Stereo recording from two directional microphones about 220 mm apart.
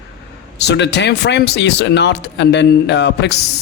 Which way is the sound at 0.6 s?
50° left (ahead or behind).